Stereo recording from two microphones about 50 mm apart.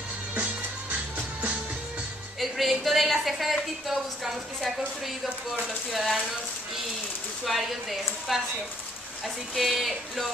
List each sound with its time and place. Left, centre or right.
0.4 s music: right
2.4 s a woman's voice: centre
7.4 s a woman's voice: centre
9.6 s a woman's voice: centre